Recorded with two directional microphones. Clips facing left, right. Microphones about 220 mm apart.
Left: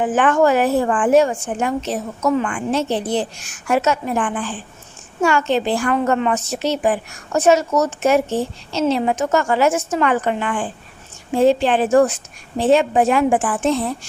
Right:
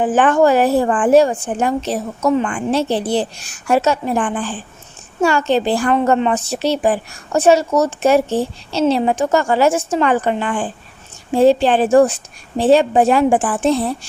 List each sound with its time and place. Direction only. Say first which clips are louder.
0.0 s a woman's voice: right 2 dB; 30° right (ahead or behind)